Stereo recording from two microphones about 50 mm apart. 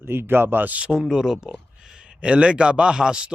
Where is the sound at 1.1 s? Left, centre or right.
Centre.